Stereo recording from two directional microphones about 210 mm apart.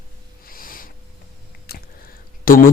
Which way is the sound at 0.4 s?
45° left (ahead or behind).